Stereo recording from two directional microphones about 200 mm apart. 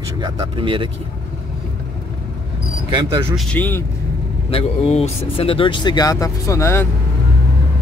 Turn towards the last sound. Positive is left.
turn(degrees=15)  # may be behind; listen again after turning